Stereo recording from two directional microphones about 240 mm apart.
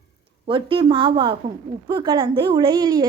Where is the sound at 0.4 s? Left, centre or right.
Right.